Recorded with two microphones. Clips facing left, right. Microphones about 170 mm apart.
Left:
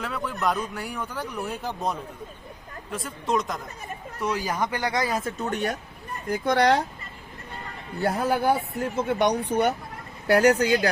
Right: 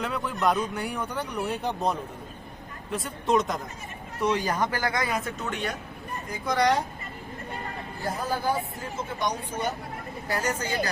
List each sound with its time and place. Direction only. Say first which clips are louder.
0.0 s speech: right 1 dB; centre (ahead or behind)
4.7 s speech: left 2 dB; 20° left (ahead or behind)
5.4 s speech: left 4 dB; 40° left (ahead or behind)
6.3 s speech: left 3 dB; 60° left (ahead or behind)
8.0 s speech: left 6 dB; 65° left (ahead or behind)